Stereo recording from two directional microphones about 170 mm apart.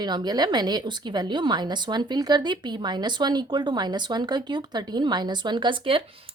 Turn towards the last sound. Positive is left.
turn(degrees=-30)  # may be behind; listen again after turning